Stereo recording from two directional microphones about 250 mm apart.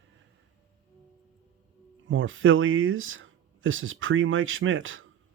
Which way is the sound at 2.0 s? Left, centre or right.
Right.